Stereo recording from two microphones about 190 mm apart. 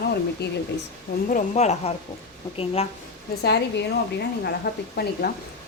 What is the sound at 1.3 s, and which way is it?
Speech, 35° left (ahead or behind).